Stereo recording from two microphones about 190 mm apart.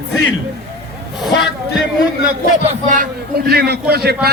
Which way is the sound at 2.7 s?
40° right (ahead or behind).